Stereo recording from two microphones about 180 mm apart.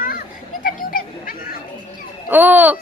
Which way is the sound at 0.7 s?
50° left (ahead or behind).